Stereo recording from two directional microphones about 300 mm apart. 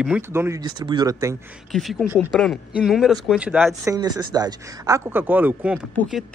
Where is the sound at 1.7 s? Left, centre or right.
Centre.